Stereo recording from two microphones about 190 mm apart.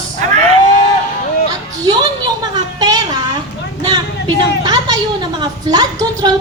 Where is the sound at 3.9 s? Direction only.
20° right (ahead or behind).